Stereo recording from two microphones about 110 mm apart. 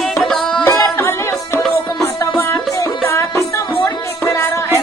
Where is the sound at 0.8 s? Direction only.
25° left (ahead or behind).